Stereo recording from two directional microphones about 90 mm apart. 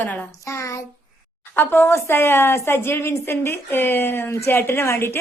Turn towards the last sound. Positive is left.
turn(degrees=30)  # may be behind; listen again after turning